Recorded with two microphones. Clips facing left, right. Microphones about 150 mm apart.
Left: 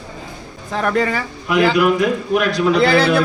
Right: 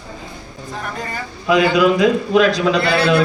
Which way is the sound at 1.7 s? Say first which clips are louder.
Right 2 dB; 90° right.